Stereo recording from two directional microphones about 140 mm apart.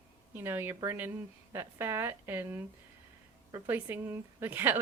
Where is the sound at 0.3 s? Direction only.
15° right (ahead or behind).